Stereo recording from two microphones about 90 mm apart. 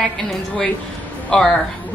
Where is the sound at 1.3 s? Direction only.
10° left (ahead or behind).